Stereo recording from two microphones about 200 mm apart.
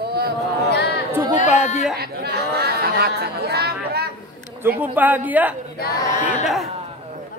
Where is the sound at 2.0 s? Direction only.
55° right (ahead or behind).